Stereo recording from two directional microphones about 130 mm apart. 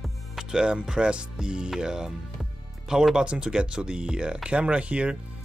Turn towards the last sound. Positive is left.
turn(degrees=-10)  # may be behind; listen again after turning